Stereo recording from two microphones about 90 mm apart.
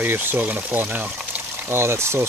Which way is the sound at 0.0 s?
20° right (ahead or behind).